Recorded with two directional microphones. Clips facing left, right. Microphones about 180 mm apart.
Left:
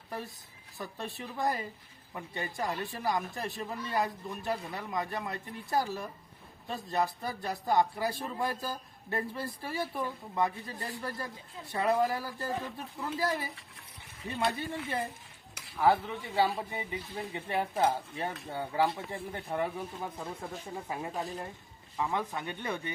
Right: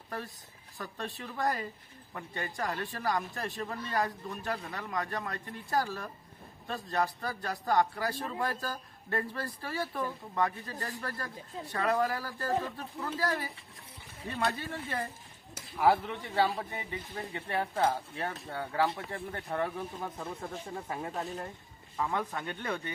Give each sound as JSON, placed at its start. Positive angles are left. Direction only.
{"t": 0.8, "sound": "a man's voice", "side_deg": 10}
{"t": 15.8, "sound": "speech", "side_deg": -5}
{"t": 16.3, "sound": "a man's voice", "side_deg": 10}